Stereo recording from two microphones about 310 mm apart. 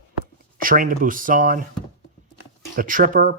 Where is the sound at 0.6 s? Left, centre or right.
Right.